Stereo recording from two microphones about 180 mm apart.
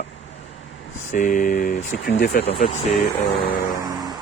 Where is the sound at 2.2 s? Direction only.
60° left (ahead or behind).